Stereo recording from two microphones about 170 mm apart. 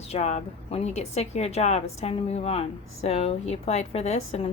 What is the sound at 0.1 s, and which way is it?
A woman's voice, 40° left (ahead or behind).